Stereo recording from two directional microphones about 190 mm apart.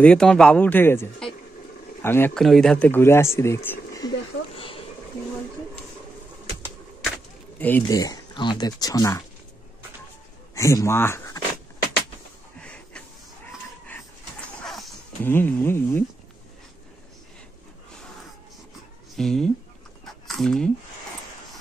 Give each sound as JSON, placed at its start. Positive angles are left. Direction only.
{"t": 0.0, "sound": "speech", "side_deg": 5}
{"t": 7.5, "sound": "speech", "side_deg": 10}
{"t": 10.5, "sound": "speech", "side_deg": 15}
{"t": 12.5, "sound": "a sound", "side_deg": 5}
{"t": 14.6, "sound": "dog", "side_deg": 0}
{"t": 15.2, "sound": "speech", "side_deg": 10}
{"t": 19.1, "sound": "speech", "side_deg": 0}
{"t": 20.1, "sound": "a sound", "side_deg": 0}